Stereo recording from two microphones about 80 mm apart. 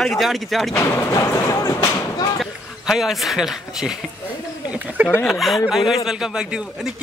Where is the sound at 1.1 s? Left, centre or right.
Left.